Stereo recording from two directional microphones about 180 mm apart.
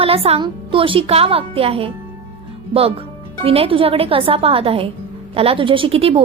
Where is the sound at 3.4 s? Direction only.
30° right (ahead or behind).